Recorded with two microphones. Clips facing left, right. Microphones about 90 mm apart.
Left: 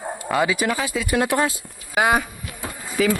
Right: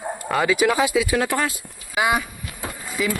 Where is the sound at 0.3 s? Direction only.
Centre (ahead or behind).